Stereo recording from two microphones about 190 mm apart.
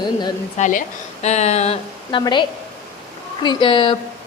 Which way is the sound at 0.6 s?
40° left (ahead or behind).